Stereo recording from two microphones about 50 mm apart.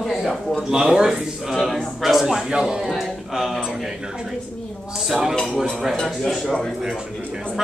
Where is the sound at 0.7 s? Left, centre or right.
Centre.